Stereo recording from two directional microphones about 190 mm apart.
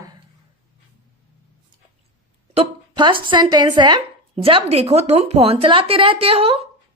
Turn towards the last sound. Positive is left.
turn(degrees=-30)  # may be behind; listen again after turning